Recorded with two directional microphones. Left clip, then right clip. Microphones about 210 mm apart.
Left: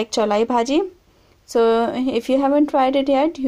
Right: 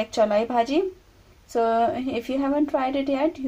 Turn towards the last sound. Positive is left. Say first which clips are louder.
# left 6 dB
turn(degrees=40)  # may be behind; listen again after turning